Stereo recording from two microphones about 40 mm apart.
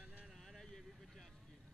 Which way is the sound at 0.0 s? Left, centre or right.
Right.